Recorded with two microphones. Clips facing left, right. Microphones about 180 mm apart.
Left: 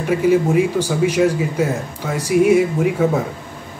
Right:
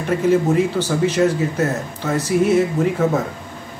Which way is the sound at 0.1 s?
10° left (ahead or behind).